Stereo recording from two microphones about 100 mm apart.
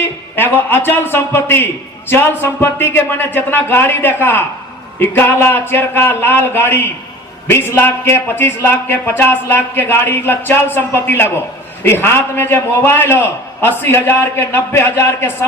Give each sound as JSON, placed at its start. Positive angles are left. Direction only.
{"t": 0.0, "sound": "a man's voice", "side_deg": 20}